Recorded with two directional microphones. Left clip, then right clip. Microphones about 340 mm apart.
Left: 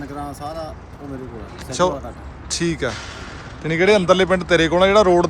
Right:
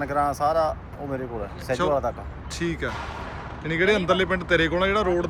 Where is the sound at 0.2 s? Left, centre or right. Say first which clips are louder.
Right 9 dB; centre.